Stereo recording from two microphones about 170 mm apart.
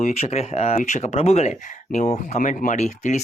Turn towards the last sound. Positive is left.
turn(degrees=45)  # may be behind; listen again after turning